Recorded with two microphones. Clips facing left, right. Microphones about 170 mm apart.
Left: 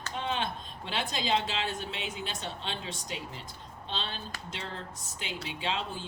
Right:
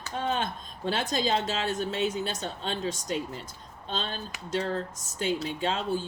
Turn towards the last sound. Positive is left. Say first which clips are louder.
# right 6 dB
turn(degrees=-40)  # may be behind; listen again after turning